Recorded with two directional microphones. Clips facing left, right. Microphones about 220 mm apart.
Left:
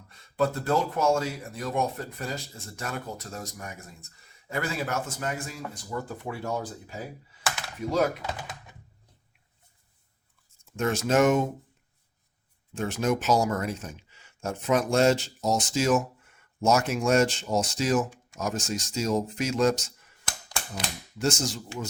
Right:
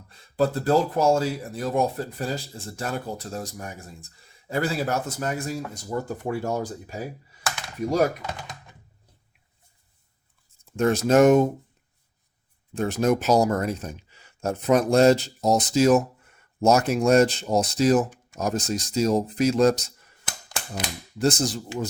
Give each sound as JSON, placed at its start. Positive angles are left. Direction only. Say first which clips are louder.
{"t": 0.1, "sound": "speech", "louder": "right 3 dB", "side_deg": -35}
{"t": 10.7, "sound": "speech", "louder": "right 5 dB", "side_deg": -35}
{"t": 12.7, "sound": "speech", "louder": "right 5 dB", "side_deg": -35}
{"t": 21.2, "sound": "speech", "louder": "right 5 dB", "side_deg": -35}